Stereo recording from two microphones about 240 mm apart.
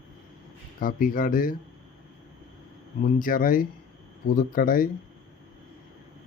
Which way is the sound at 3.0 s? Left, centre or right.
Left.